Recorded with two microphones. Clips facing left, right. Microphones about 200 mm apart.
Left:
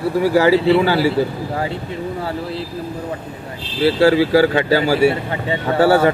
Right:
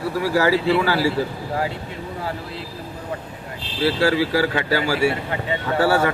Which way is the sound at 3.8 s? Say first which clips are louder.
Left 6 dB; 25° left (ahead or behind).